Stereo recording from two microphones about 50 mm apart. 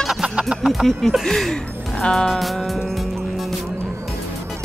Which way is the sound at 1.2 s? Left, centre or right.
Centre.